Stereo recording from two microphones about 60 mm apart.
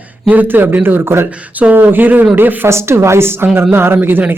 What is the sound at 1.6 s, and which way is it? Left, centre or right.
Speech, right.